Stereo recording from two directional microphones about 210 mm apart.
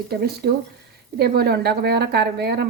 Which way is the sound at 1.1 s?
50° right (ahead or behind).